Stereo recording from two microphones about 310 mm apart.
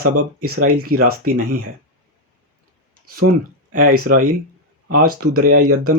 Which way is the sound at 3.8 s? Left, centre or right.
Right.